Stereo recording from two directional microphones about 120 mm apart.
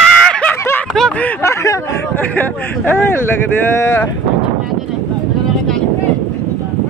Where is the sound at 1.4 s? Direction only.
25° left (ahead or behind).